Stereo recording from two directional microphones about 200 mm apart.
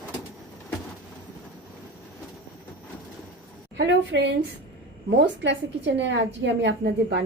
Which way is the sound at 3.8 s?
60° right (ahead or behind).